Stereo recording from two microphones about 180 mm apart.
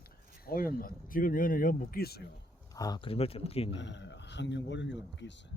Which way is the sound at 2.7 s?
20° left (ahead or behind).